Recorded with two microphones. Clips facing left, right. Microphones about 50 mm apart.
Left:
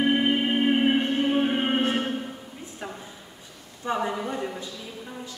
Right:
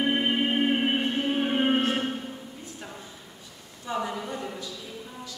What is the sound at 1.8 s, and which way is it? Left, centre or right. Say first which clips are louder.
Music: left 1 dB; centre.